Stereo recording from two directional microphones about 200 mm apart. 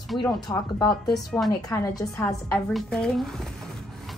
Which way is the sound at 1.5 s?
15° left (ahead or behind).